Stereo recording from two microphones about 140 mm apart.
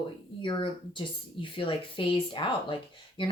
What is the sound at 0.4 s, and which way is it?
Speech, 35° left (ahead or behind).